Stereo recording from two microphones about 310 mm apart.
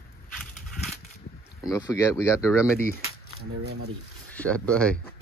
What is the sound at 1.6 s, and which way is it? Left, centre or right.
Speech, centre.